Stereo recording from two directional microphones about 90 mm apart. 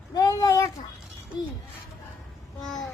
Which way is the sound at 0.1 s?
45° left (ahead or behind).